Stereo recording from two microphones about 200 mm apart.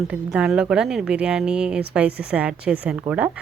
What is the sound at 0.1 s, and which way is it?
Speech, 5° right (ahead or behind).